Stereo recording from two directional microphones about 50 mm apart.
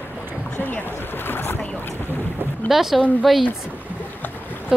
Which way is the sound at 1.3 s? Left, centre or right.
Left.